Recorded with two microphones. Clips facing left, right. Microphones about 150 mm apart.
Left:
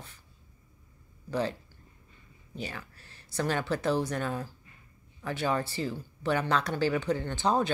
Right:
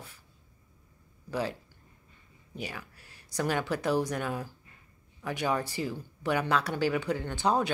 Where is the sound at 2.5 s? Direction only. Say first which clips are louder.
Even; 10° right (ahead or behind).